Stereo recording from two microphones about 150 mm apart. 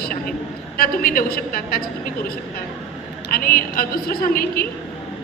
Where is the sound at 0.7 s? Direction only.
80° left.